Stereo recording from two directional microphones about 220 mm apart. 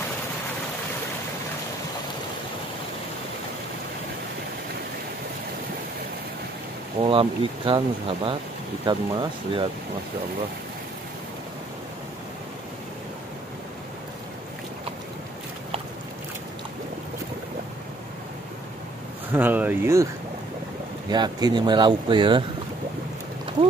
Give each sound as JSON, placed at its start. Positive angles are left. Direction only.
{"t": 7.0, "sound": "speech", "side_deg": -25}
{"t": 19.3, "sound": "speech", "side_deg": -10}
{"t": 21.1, "sound": "speech", "side_deg": -20}